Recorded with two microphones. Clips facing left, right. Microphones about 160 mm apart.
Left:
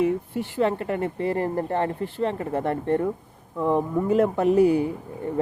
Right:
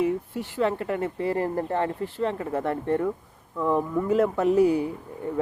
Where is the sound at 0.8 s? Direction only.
45° left (ahead or behind).